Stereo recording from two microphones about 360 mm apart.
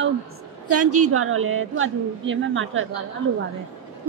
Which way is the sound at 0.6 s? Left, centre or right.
Right.